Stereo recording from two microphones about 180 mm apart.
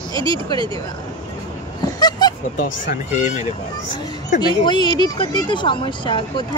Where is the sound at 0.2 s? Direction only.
20° left (ahead or behind).